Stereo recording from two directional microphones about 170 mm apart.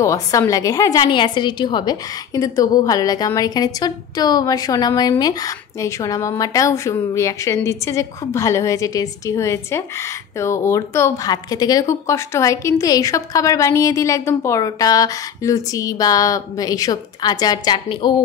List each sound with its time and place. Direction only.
0.0 s a woman's voice: 20° left (ahead or behind)